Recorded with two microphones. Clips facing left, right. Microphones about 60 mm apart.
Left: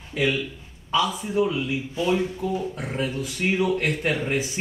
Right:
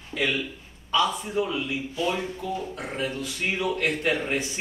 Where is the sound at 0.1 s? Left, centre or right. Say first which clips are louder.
Left 3 dB; centre.